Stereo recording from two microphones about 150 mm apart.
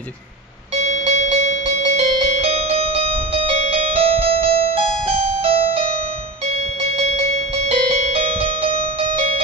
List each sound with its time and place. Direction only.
0.9 s music: 45° right (ahead or behind)
7.7 s music: 45° right (ahead or behind)
8.7 s music: 55° left (ahead or behind)